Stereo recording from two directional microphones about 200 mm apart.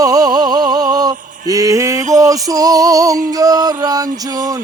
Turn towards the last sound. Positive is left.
turn(degrees=-20)  # may be behind; listen again after turning